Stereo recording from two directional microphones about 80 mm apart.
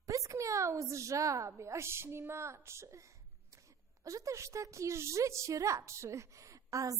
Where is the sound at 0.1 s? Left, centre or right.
Right.